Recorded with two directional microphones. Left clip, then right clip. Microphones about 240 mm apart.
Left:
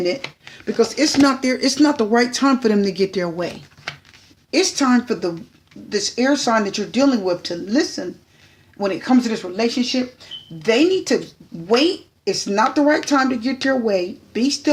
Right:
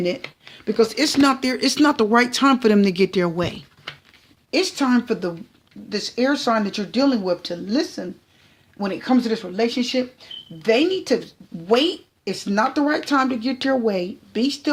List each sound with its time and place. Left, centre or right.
0.6 s speech: right
4.5 s speech: right